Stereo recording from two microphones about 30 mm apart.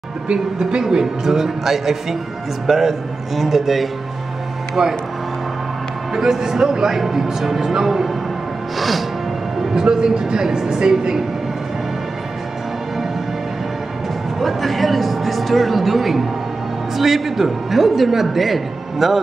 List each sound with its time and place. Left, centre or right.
0.6 s speech: right
1.2 s a man's voice: centre
4.8 s speech: right
6.1 s a man's voice: centre
8.7 s music: centre
9.8 s speech: right
14.4 s a man's voice: centre